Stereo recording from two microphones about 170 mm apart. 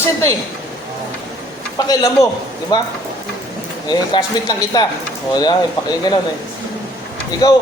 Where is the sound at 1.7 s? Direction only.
20° left (ahead or behind).